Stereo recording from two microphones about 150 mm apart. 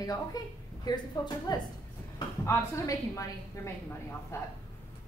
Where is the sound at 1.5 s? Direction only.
25° left (ahead or behind).